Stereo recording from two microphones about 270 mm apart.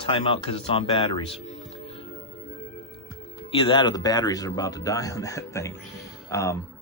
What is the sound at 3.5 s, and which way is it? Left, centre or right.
Speech, centre.